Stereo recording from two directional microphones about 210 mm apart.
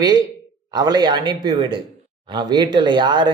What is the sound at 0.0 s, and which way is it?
Speech, 20° right (ahead or behind).